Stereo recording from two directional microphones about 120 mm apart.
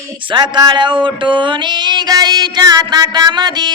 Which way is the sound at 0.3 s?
40° right (ahead or behind).